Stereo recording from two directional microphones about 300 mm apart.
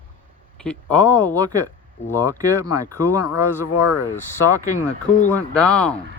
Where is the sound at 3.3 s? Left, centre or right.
Left.